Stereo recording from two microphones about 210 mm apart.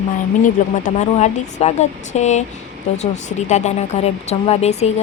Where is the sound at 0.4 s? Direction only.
35° left (ahead or behind).